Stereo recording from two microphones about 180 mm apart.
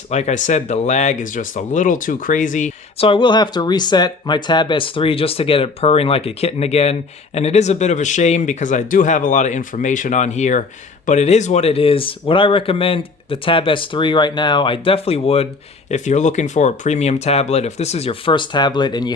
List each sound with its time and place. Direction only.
0.1 s speech: 40° left (ahead or behind)
3.1 s speech: 25° left (ahead or behind)